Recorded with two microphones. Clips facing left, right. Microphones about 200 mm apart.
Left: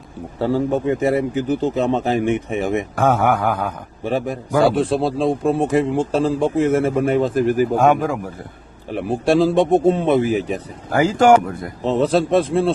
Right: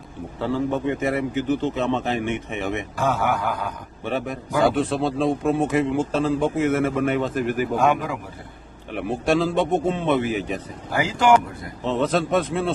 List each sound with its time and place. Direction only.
0.3 s a man's voice: 40° left (ahead or behind)
2.9 s a sound: 55° left (ahead or behind)
4.0 s a man's voice: 35° left (ahead or behind)
7.8 s speech: 45° left (ahead or behind)
8.9 s a man's voice: 35° left (ahead or behind)